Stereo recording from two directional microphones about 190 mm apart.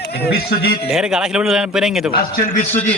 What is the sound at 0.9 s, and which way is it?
Speech, 5° right (ahead or behind).